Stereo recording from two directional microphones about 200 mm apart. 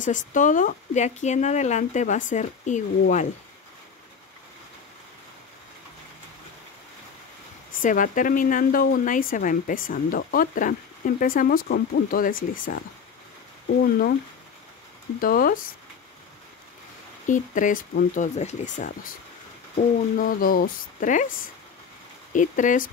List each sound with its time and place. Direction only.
0.0 s speech: 40° left (ahead or behind)
7.8 s speech: 40° left (ahead or behind)
15.1 s speech: 45° left (ahead or behind)
17.3 s speech: 40° left (ahead or behind)
20.2 s speech: 45° left (ahead or behind)
22.3 s speech: 40° left (ahead or behind)